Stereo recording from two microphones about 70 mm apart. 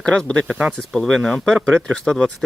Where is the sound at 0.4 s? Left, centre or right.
Centre.